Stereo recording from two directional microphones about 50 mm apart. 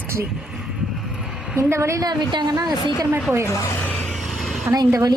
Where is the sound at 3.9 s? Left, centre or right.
Left.